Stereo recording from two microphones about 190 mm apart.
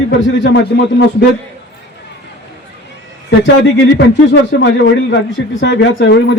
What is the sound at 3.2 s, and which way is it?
Speech, 70° left (ahead or behind).